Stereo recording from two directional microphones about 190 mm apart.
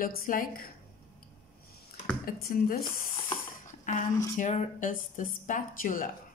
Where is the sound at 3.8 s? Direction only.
40° left (ahead or behind).